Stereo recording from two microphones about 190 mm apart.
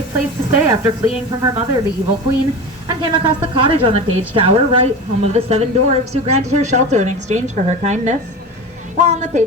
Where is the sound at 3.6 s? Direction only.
30° right (ahead or behind).